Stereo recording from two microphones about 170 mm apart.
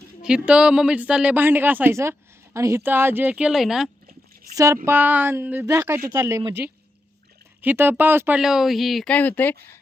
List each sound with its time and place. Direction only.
0.2 s speech: 5° right (ahead or behind)
4.5 s speech: 20° right (ahead or behind); by 9.6 s 10° left (ahead or behind)